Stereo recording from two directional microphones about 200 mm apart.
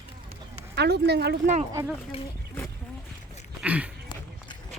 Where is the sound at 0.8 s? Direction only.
55° right (ahead or behind).